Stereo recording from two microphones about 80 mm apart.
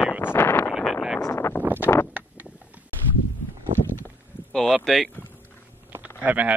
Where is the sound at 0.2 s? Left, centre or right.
Left.